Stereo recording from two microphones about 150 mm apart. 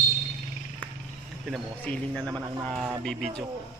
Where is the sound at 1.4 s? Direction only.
5° left (ahead or behind).